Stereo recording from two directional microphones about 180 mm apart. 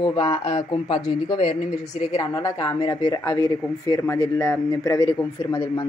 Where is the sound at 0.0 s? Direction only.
25° left (ahead or behind).